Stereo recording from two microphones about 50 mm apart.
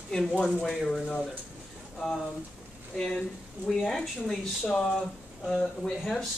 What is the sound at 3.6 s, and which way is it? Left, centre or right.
Speech, centre.